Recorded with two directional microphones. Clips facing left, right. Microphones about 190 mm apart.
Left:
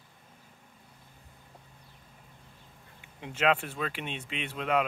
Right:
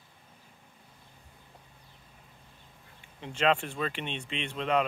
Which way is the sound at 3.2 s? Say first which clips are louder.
Even; 5° left (ahead or behind).